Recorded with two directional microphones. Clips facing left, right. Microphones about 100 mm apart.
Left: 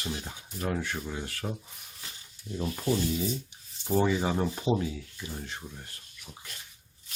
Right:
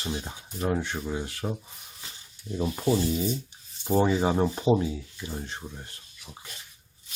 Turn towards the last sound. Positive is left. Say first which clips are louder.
# right 3 dB
turn(degrees=-30)  # may be behind; listen again after turning